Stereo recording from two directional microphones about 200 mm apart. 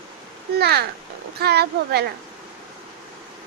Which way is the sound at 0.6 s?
55° right (ahead or behind).